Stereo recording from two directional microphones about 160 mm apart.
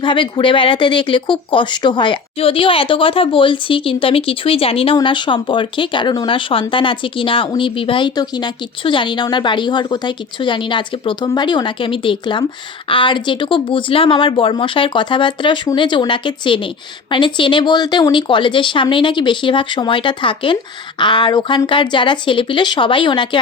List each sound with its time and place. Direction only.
0.0 s speech: 30° left (ahead or behind)